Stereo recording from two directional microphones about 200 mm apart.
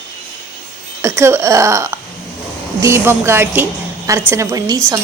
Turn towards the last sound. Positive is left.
turn(degrees=-15)  # may be behind; listen again after turning